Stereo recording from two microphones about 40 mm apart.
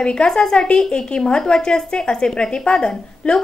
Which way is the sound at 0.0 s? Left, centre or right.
Left.